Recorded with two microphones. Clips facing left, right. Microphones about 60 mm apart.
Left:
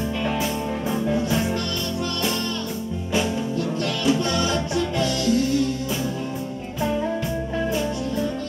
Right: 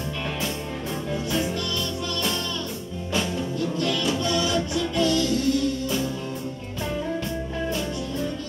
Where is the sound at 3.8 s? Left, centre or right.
Left.